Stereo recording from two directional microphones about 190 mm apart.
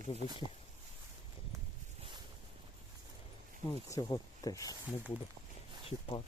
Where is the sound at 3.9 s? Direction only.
20° left (ahead or behind).